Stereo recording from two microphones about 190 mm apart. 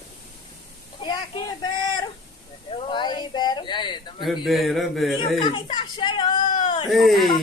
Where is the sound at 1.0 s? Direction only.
25° left (ahead or behind).